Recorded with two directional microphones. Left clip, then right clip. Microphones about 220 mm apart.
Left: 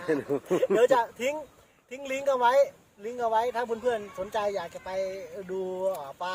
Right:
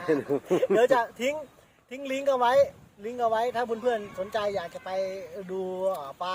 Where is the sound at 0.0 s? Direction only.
Centre (ahead or behind).